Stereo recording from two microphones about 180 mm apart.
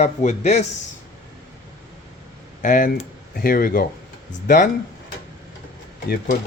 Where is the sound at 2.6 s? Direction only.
45° left (ahead or behind).